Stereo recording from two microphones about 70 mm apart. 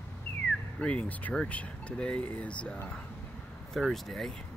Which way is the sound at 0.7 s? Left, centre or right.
Centre.